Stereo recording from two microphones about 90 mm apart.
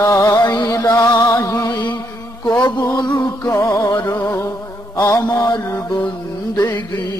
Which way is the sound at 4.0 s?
25° left (ahead or behind).